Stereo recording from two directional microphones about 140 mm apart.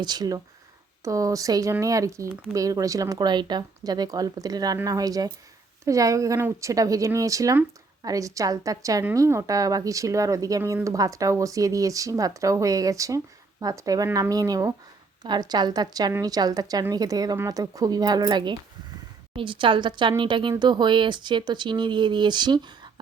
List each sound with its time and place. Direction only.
0.0 s speech: 30° right (ahead or behind)